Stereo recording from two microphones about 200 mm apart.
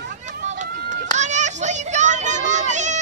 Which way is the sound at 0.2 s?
35° right (ahead or behind).